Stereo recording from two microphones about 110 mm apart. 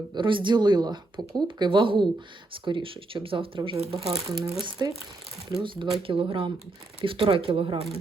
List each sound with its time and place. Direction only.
0.1 s speech: 50° right (ahead or behind)
3.9 s speech: 5° right (ahead or behind)
4.8 s speech: 40° right (ahead or behind)
5.5 s speech: 50° right (ahead or behind)